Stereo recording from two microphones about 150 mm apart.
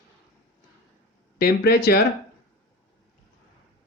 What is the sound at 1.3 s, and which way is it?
Speech, 90° left.